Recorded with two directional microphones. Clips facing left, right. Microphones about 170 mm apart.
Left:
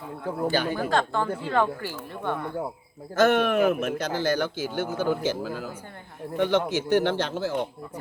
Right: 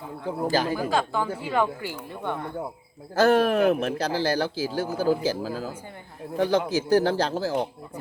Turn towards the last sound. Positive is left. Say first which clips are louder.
# right 2 dB
turn(degrees=-35)  # may be behind; listen again after turning